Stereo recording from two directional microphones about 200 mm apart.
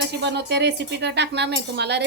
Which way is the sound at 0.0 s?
60° right (ahead or behind).